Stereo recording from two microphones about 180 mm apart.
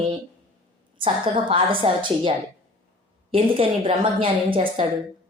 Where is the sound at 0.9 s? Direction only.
30° right (ahead or behind).